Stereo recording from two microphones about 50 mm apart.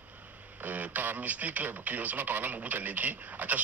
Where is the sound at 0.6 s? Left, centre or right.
Right.